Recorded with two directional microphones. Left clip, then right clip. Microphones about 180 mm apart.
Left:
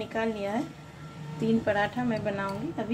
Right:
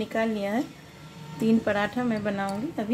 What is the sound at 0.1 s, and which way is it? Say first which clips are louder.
Speech: right 2 dB; 65° right (ahead or behind).